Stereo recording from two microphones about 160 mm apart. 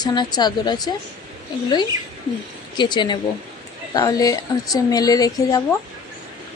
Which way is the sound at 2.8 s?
30° left (ahead or behind).